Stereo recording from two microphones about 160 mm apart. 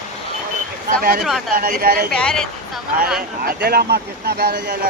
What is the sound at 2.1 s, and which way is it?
Speech, 5° left (ahead or behind).